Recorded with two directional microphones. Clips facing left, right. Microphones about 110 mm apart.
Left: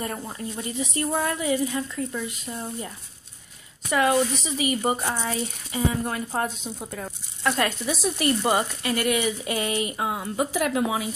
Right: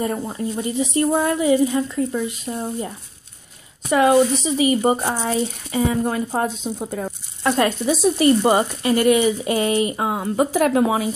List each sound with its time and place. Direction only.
0.0 s speech: 20° right (ahead or behind)
3.9 s speech: 25° right (ahead or behind)
6.0 s speech: 25° right (ahead or behind); by 11.1 s 45° right (ahead or behind)